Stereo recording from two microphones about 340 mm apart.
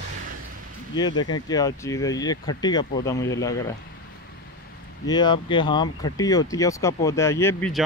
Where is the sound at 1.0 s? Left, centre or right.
Centre.